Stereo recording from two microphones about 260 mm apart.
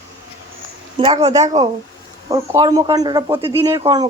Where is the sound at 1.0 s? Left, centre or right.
Right.